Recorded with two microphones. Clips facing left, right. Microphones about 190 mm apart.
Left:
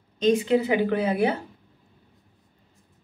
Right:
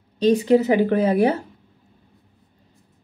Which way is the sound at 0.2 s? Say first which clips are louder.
Right 4 dB; 35° right (ahead or behind).